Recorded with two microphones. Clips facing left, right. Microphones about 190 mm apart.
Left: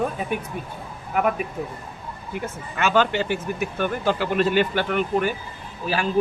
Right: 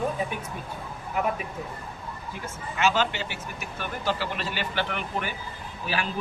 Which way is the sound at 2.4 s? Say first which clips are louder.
Even; 55° left (ahead or behind).